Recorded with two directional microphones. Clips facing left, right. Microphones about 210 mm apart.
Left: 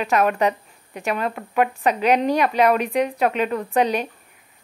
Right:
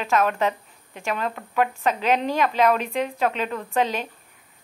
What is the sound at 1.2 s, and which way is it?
Speech, 10° left (ahead or behind).